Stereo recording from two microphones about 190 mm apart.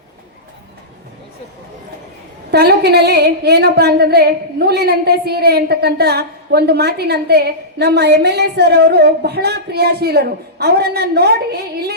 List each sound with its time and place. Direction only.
2.5 s a woman's voice: 60° right (ahead or behind)